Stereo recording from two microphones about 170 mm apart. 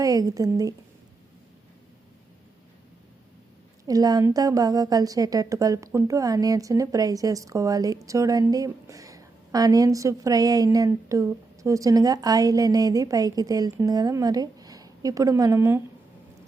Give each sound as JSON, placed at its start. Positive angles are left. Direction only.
{"t": 0.0, "sound": "speech", "side_deg": -20}
{"t": 3.8, "sound": "a woman's voice", "side_deg": -20}